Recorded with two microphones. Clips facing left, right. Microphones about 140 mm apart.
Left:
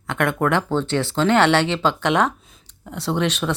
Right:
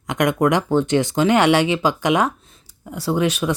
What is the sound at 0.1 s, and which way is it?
Speech, 15° right (ahead or behind).